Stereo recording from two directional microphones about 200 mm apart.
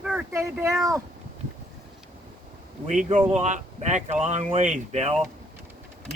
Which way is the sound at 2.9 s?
40° right (ahead or behind).